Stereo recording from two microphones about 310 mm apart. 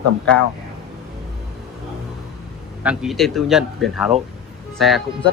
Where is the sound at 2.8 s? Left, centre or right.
Centre.